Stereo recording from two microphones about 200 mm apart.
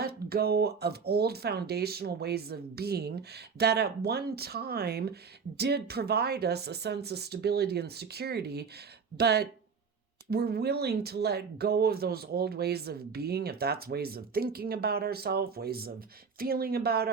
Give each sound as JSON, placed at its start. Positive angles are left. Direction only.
{"t": 0.0, "sound": "speech", "side_deg": -50}